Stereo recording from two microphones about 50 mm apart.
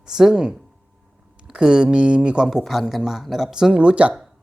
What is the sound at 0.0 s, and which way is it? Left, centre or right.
Speech, centre.